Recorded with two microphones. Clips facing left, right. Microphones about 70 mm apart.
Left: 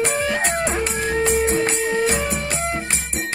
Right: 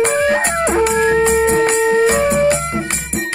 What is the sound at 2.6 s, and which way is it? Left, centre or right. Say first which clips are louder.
Music: right 3 dB; right.